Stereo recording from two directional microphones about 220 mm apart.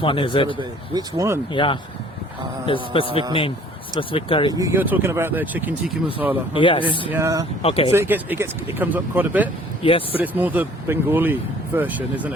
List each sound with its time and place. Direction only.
0.0 s a man's voice: 25° left (ahead or behind)
0.6 s speech: 15° right (ahead or behind)
1.5 s a man's voice: 20° left (ahead or behind)
4.5 s speech: 15° right (ahead or behind)
6.5 s a man's voice: 25° left (ahead or behind)
7.1 s speech: 15° right (ahead or behind)
7.6 s a man's voice: 25° left (ahead or behind)
7.9 s speech: 10° right (ahead or behind)
9.8 s a man's voice: 25° left (ahead or behind)
10.2 s speech: 5° right (ahead or behind)